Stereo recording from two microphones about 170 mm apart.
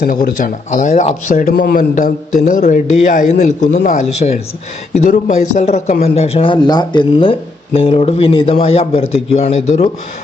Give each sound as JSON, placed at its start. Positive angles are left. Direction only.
{"t": 0.0, "sound": "a man's voice", "side_deg": 55}